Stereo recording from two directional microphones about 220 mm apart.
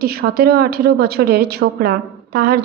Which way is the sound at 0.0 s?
45° right (ahead or behind).